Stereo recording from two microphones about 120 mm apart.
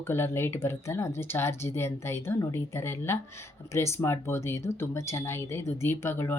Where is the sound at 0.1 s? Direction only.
20° left (ahead or behind).